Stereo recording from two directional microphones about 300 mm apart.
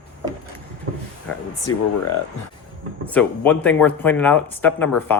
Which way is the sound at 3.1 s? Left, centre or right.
Centre.